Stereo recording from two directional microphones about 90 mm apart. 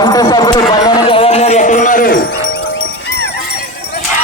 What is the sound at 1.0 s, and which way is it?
Music, 90° left.